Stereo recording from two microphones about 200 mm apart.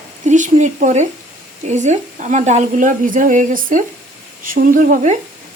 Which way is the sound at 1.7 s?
35° right (ahead or behind).